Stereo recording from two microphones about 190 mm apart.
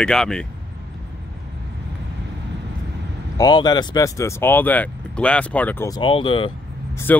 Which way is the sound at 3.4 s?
20° left (ahead or behind).